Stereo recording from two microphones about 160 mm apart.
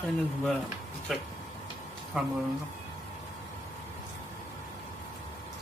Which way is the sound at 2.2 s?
5° right (ahead or behind).